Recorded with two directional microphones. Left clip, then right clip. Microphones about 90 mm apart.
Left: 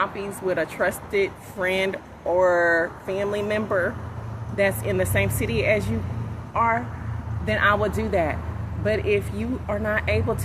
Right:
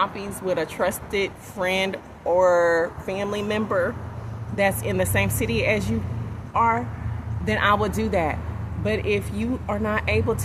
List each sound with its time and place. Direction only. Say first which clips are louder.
0.0 s speech: even; 30° right (ahead or behind)
7.4 s speech: even; 40° right (ahead or behind)